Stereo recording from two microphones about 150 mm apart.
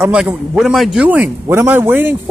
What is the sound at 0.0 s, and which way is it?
A man's voice, 5° right (ahead or behind).